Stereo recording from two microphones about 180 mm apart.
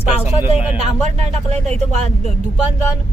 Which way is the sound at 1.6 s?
40° right (ahead or behind).